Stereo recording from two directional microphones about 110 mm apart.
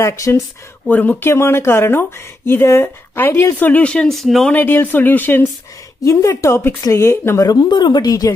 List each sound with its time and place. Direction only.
0.0 s speech: 25° left (ahead or behind)
0.8 s speech: 15° left (ahead or behind)
4.6 s speech: 15° left (ahead or behind)
6.0 s speech: 30° left (ahead or behind)
7.4 s speech: 40° left (ahead or behind)